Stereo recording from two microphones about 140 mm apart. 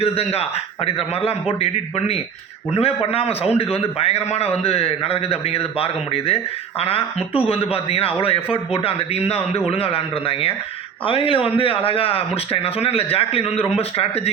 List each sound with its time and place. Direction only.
0.0 s a man's voice: 45° left (ahead or behind)